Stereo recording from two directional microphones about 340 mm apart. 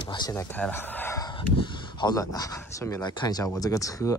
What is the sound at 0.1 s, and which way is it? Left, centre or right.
Speech, centre.